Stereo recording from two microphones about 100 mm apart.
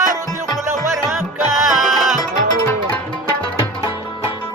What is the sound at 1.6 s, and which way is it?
Music, centre (ahead or behind).